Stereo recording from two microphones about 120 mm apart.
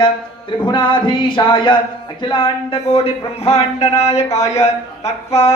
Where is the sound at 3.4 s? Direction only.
60° left (ahead or behind).